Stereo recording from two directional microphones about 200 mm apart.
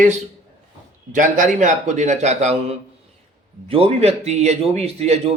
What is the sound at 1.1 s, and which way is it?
A man's voice, 40° right (ahead or behind).